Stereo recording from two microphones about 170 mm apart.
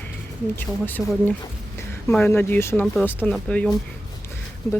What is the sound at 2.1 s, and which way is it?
Speech, 10° left (ahead or behind).